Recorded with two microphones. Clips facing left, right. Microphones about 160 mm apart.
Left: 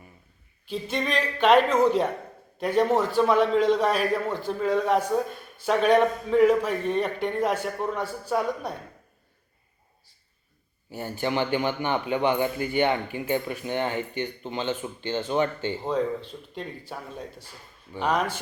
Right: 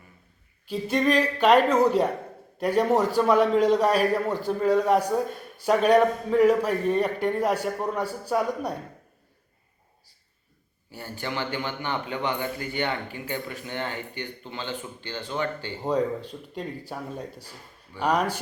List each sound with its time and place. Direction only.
0.7 s a man's voice: 10° right (ahead or behind)
10.9 s a man's voice: 20° left (ahead or behind)
15.8 s a man's voice: 10° right (ahead or behind)